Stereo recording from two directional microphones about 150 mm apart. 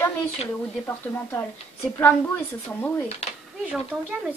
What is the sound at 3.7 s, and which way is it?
Speech, 10° right (ahead or behind).